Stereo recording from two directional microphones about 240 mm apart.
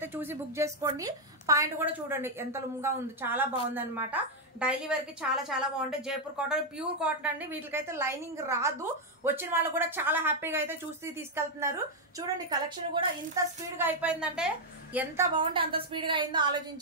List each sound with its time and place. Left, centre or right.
0.0 s a woman's voice: centre